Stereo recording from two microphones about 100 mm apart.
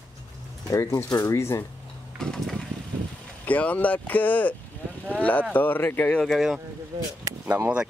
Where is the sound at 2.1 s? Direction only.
5° left (ahead or behind).